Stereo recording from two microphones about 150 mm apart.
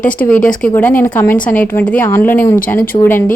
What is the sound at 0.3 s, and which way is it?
A woman's voice, 10° left (ahead or behind).